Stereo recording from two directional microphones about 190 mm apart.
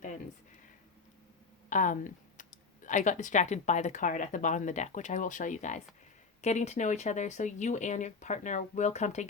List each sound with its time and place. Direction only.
1.7 s speech: 45° left (ahead or behind)